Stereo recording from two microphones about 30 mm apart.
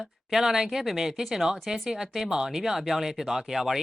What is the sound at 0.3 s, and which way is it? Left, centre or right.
Speech, centre.